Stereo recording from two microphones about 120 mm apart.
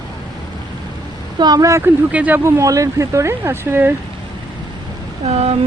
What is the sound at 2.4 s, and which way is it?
Speech, 25° right (ahead or behind).